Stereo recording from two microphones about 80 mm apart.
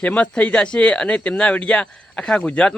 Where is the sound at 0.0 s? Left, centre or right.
Centre.